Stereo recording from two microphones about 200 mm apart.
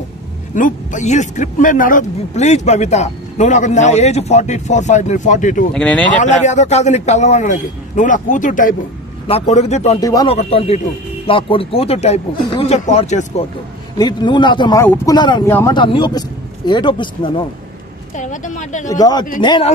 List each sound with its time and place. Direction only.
0.6 s speech: 40° left (ahead or behind)
5.7 s speech: 5° left (ahead or behind)
6.1 s speech: 35° left (ahead or behind)
9.9 s speech: 20° left (ahead or behind)
10.3 s speech: 30° left (ahead or behind)
13.9 s speech: 20° left (ahead or behind)
18.1 s a sound: 40° left (ahead or behind)
18.9 s speech: 20° left (ahead or behind)